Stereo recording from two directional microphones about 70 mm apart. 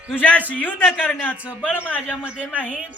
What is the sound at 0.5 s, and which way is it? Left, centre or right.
Speech, left.